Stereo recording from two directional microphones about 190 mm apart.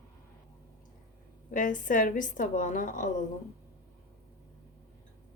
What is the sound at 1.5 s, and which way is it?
A woman's voice, 45° left (ahead or behind).